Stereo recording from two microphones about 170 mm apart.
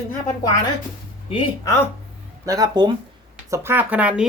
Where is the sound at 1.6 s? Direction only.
15° left (ahead or behind).